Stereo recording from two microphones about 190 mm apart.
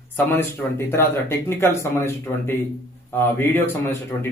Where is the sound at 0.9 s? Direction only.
15° left (ahead or behind).